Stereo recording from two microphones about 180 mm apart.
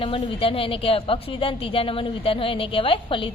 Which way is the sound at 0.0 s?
30° left (ahead or behind).